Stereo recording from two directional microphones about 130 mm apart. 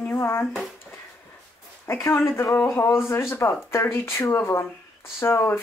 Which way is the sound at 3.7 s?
20° left (ahead or behind).